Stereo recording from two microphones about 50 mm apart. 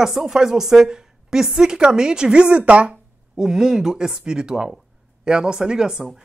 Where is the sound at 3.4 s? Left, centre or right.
Centre.